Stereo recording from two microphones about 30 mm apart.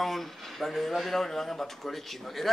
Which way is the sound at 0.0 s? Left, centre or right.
Centre.